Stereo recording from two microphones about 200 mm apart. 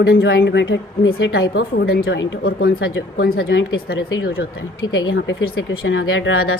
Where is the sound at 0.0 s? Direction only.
65° left (ahead or behind).